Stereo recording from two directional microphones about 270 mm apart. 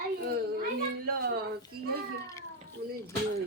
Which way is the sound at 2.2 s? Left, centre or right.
Centre.